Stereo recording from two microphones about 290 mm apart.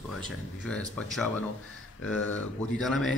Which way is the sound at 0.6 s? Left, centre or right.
Centre.